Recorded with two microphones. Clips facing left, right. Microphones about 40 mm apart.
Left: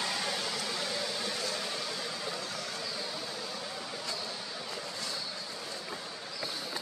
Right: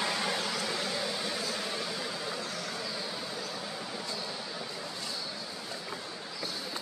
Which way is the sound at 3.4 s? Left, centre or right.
Centre.